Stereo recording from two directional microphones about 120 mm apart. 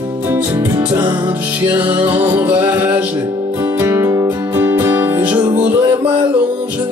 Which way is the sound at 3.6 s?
25° right (ahead or behind).